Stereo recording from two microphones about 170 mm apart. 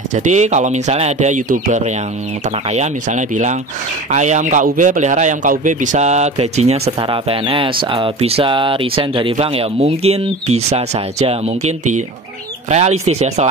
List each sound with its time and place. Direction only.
0.1 s a man's voice: 45° right (ahead or behind)
7.0 s speech: 30° right (ahead or behind)